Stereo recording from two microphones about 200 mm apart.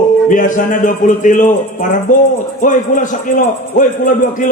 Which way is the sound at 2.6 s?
40° left (ahead or behind).